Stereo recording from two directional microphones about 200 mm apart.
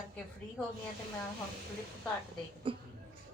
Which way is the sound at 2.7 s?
25° right (ahead or behind).